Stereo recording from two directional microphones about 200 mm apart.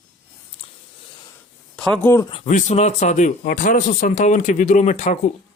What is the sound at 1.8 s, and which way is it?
Speech, 5° left (ahead or behind).